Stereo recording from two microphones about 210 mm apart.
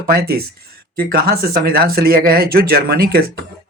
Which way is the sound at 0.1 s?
50° right (ahead or behind).